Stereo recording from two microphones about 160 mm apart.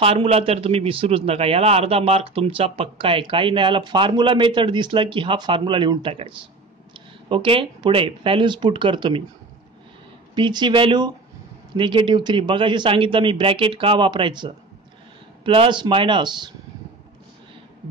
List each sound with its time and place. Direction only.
0.0 s a man's voice: 40° right (ahead or behind)
10.3 s a man's voice: 30° right (ahead or behind)